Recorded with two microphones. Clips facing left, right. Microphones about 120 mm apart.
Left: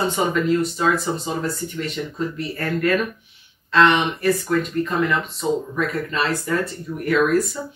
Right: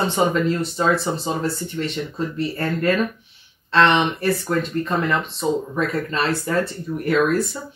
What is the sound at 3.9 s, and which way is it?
Speech, 30° right (ahead or behind).